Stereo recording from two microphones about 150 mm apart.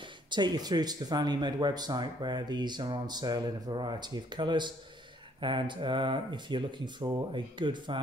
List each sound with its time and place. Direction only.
0.3 s speech: 30° right (ahead or behind)